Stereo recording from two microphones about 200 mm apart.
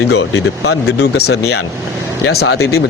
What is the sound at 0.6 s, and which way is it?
Speech, 55° left (ahead or behind).